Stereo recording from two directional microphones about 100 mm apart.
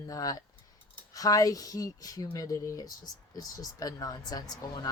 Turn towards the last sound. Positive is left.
turn(degrees=40)  # may be behind; listen again after turning